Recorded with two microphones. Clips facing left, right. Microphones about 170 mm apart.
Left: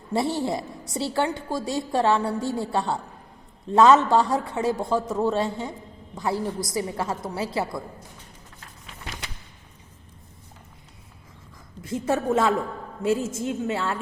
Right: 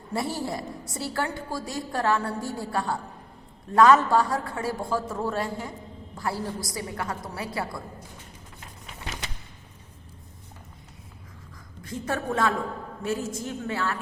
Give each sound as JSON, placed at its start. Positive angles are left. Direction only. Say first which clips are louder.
{"t": 0.1, "sound": "a woman's voice", "louder": "left 5 dB", "side_deg": 25}
{"t": 12.0, "sound": "a woman's voice", "louder": "left 4 dB", "side_deg": 25}